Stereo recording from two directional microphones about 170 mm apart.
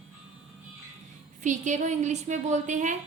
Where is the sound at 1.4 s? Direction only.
45° right (ahead or behind).